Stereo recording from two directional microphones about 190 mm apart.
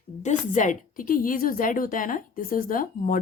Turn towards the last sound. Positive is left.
turn(degrees=45)  # may be behind; listen again after turning